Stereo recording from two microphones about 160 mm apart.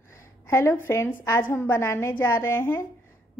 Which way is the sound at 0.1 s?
15° left (ahead or behind).